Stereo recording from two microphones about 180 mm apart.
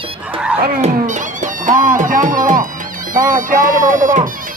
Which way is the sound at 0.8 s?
45° right (ahead or behind).